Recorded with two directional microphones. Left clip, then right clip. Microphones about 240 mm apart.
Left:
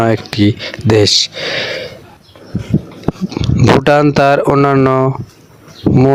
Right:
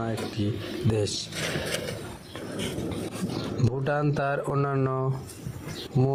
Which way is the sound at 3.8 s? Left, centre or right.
Left.